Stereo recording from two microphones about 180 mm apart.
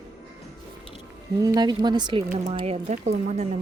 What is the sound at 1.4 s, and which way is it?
Speech, 20° right (ahead or behind).